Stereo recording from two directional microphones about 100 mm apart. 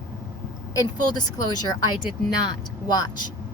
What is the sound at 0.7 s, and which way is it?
Speech, 40° left (ahead or behind).